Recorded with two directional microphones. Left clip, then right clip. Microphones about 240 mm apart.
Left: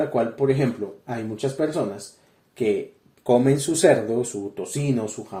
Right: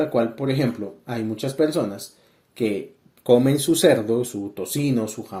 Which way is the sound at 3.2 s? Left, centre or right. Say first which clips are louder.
Right 2 dB; right.